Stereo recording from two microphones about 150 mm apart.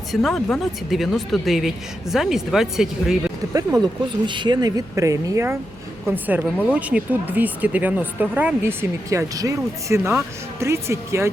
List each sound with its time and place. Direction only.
0.1 s speech: centre (ahead or behind)
3.5 s speech: 25° right (ahead or behind)